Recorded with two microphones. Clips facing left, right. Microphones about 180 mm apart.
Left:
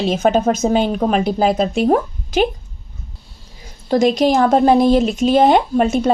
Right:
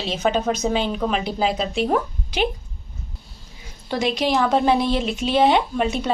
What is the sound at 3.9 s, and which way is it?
Speech, 45° left (ahead or behind).